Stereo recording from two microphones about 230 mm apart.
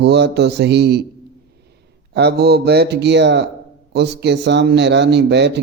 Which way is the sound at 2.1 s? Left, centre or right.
Right.